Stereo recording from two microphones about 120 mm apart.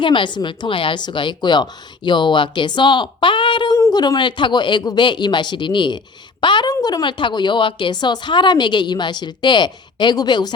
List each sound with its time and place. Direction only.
0.0 s a woman's voice: 45° left (ahead or behind)